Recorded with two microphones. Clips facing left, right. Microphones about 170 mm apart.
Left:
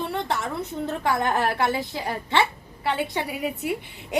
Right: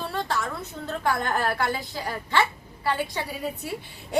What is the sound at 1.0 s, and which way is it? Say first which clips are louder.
Speech: left 1 dB; 20° left (ahead or behind).